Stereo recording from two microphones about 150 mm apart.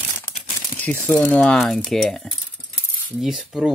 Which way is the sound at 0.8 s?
10° left (ahead or behind).